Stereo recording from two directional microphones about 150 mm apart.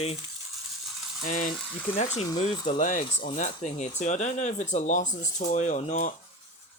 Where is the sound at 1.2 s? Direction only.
65° left (ahead or behind).